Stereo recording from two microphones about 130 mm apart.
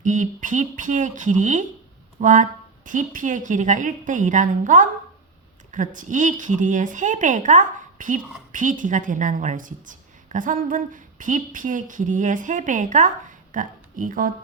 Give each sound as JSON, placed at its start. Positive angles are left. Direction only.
{"t": 0.0, "sound": "speech", "side_deg": -75}